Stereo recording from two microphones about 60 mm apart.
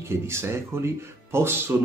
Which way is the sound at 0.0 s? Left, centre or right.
Right.